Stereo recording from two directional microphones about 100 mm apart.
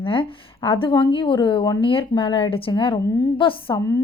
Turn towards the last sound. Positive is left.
turn(degrees=40)  # may be behind; listen again after turning